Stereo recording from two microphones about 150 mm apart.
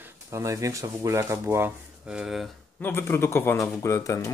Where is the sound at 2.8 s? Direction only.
15° left (ahead or behind).